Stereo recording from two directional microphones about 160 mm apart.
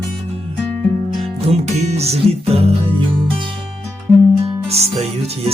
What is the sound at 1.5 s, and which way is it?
Music, 40° right (ahead or behind).